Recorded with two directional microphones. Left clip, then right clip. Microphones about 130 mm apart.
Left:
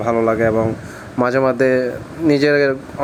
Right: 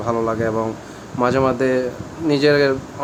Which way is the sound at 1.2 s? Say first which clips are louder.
Left 2 dB; 45° left (ahead or behind).